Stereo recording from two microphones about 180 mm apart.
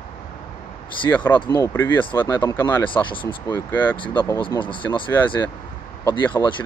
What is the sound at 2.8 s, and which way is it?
Speech, 25° left (ahead or behind).